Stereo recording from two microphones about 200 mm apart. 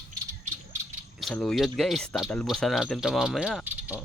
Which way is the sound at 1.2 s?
Centre (ahead or behind).